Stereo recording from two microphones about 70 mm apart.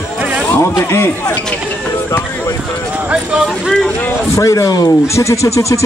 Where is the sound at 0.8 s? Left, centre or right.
Left.